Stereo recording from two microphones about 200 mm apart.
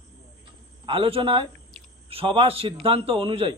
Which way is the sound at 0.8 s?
25° right (ahead or behind).